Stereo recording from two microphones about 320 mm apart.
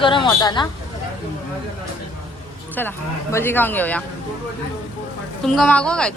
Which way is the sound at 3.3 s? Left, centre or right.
Centre.